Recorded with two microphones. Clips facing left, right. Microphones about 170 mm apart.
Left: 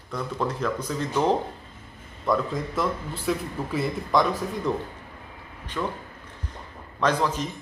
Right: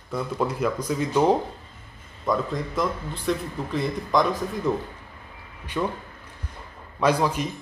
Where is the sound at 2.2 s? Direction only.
Centre (ahead or behind).